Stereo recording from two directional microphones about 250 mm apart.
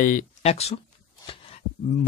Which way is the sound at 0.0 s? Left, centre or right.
Left.